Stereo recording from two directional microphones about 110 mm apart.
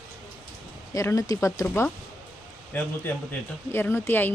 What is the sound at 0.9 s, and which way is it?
A woman's voice, 30° left (ahead or behind).